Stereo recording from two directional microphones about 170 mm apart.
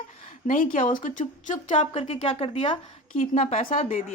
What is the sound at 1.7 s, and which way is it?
Speech, 35° left (ahead or behind).